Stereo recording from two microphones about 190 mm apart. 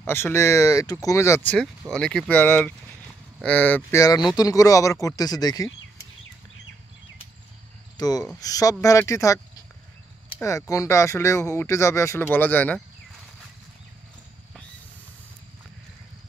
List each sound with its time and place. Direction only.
0.0 s speech: 15° left (ahead or behind)
8.0 s speech: 20° left (ahead or behind)
10.4 s speech: 15° left (ahead or behind)